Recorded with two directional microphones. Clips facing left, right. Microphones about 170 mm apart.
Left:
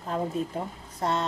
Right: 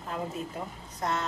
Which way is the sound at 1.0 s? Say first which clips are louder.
Left 4 dB; 30° left (ahead or behind).